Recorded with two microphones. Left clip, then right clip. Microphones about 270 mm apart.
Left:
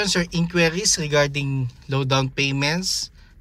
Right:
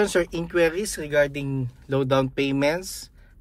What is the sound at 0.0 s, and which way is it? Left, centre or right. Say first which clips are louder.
Speech: right 1 dB; centre.